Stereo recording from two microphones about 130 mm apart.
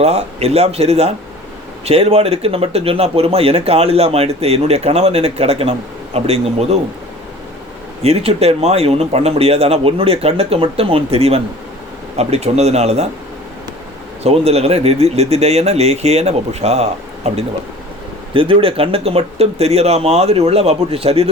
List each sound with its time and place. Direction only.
0.0 s speech: 55° right (ahead or behind)
8.0 s speech: 50° right (ahead or behind)
14.3 s speech: 50° right (ahead or behind)
18.3 s speech: 45° right (ahead or behind)